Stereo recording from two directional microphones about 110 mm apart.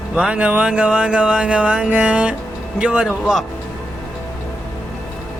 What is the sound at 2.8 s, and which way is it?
Speech, 10° right (ahead or behind).